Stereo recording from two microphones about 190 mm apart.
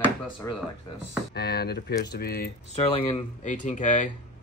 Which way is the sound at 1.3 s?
55° left (ahead or behind).